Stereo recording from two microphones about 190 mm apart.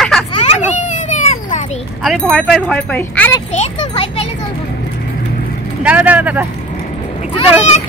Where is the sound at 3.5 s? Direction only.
35° left (ahead or behind).